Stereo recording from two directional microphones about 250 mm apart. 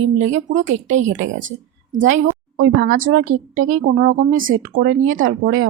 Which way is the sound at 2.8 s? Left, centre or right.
Right.